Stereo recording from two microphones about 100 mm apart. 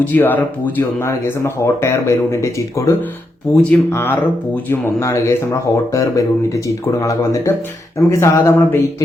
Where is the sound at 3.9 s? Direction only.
20° left (ahead or behind).